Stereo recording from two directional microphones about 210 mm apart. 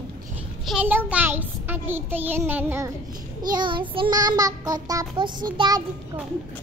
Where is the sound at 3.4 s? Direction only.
20° right (ahead or behind).